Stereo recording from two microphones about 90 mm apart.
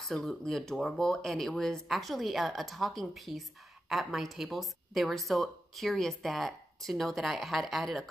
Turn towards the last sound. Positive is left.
turn(degrees=0)  # may be behind; listen again after turning